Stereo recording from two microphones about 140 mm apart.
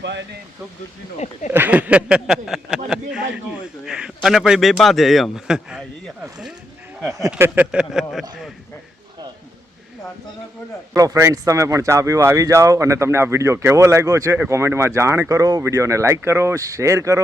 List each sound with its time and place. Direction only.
1.5 s a man's voice: 10° right (ahead or behind)
7.3 s speech: 15° right (ahead or behind)
10.9 s speech: 20° right (ahead or behind)